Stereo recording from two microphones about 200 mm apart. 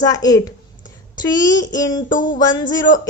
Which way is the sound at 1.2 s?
20° left (ahead or behind).